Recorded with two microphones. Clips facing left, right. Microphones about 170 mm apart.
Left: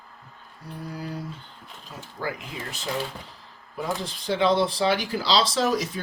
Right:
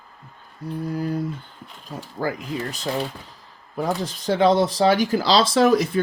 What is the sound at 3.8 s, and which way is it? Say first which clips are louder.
Speech: right 5 dB; 45° right (ahead or behind).